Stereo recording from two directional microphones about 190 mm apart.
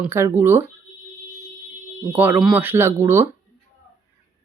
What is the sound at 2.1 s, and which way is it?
Speech, 10° right (ahead or behind).